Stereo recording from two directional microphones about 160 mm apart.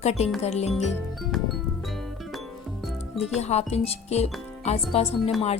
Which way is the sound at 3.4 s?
40° left (ahead or behind).